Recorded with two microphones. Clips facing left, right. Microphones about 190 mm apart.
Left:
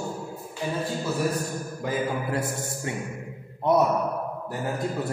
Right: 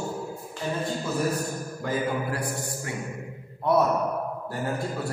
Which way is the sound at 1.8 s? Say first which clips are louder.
Even; 25° left (ahead or behind).